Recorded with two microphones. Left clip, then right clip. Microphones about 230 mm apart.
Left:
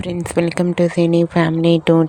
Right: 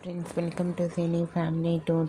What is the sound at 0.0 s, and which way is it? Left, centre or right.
A woman's voice, left.